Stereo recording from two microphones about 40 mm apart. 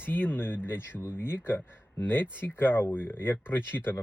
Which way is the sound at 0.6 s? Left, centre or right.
Left.